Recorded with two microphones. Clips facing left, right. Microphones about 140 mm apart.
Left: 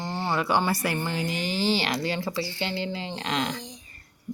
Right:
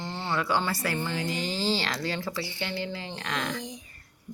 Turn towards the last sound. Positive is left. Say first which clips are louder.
# left 3 dB
turn(degrees=20)  # may be behind; listen again after turning